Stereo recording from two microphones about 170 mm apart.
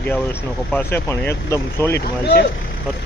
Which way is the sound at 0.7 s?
10° left (ahead or behind).